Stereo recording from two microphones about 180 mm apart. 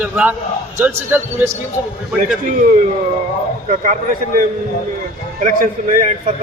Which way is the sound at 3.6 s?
45° right (ahead or behind).